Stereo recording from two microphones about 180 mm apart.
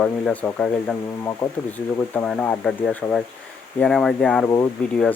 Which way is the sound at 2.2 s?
Centre (ahead or behind).